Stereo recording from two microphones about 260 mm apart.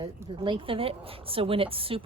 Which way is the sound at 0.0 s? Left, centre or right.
Centre.